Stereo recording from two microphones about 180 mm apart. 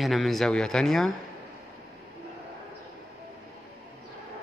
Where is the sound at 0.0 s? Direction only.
Centre (ahead or behind).